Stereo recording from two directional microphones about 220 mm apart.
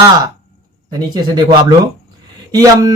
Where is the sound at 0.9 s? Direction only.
20° right (ahead or behind).